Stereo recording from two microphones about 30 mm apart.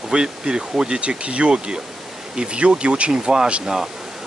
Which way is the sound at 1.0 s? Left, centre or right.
Right.